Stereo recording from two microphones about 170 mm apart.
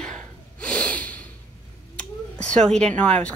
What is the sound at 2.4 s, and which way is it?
Speech, 5° left (ahead or behind).